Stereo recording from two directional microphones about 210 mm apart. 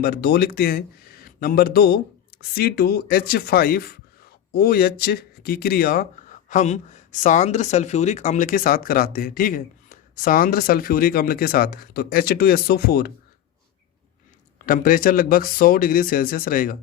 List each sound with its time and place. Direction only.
0.0 s speech: 45° left (ahead or behind)
14.6 s speech: 40° left (ahead or behind)